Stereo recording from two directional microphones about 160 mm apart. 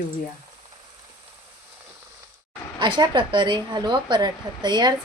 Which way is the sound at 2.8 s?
30° right (ahead or behind).